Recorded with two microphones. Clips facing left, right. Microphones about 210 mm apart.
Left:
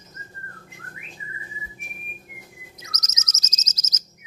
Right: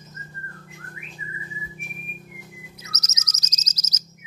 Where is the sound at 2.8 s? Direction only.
10° right (ahead or behind).